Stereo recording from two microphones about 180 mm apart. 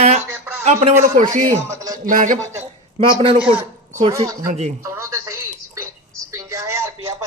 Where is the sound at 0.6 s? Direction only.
40° right (ahead or behind).